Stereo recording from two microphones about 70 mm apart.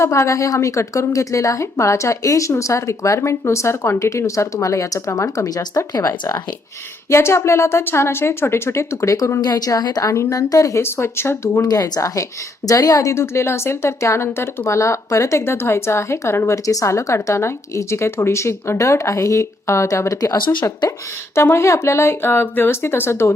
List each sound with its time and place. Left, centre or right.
0.0 s a woman's voice: left
7.1 s a woman's voice: left
9.4 s a woman's voice: left
10.1 s a woman's voice: left
10.8 s a woman's voice: left
11.7 s a woman's voice: left
21.3 s a woman's voice: left